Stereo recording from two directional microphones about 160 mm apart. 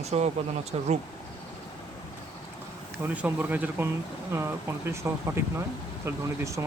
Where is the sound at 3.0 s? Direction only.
10° right (ahead or behind).